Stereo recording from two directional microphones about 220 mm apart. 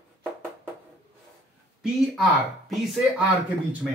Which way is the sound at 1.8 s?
Centre (ahead or behind).